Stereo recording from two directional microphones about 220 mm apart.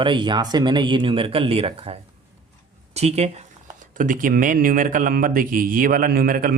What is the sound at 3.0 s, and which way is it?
Speech, 30° right (ahead or behind).